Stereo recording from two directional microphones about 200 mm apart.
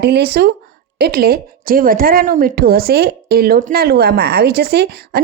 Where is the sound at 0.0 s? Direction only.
55° right (ahead or behind).